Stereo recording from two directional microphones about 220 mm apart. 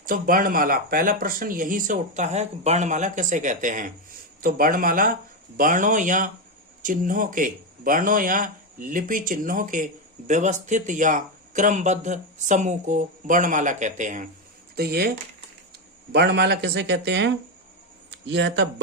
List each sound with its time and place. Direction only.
0.0 s speech: 40° right (ahead or behind)
14.8 s speech: 45° right (ahead or behind)
16.1 s speech: 50° right (ahead or behind)